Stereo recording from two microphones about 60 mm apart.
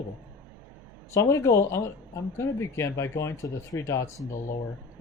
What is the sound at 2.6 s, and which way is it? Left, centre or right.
Speech, left.